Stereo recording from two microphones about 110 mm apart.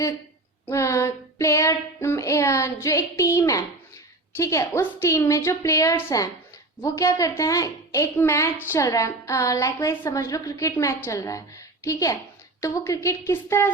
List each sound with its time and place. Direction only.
0.6 s child singing: 25° left (ahead or behind)
6.8 s a woman's voice: 30° left (ahead or behind)
8.2 s child singing: 25° left (ahead or behind)